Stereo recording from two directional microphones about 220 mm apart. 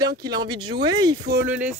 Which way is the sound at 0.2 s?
20° right (ahead or behind).